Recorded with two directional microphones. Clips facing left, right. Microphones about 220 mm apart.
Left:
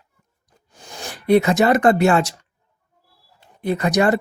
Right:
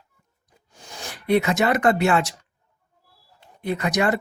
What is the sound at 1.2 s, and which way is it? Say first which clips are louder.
Speech: left 5 dB; 35° left (ahead or behind).